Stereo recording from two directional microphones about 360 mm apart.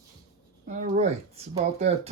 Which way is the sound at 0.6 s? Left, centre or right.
Centre.